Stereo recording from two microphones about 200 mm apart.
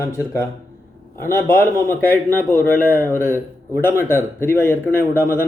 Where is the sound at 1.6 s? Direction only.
10° left (ahead or behind).